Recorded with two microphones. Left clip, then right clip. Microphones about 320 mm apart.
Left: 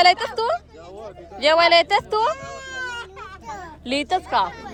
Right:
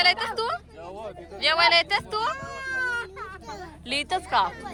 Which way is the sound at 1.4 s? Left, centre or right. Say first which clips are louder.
Left 5 dB; centre.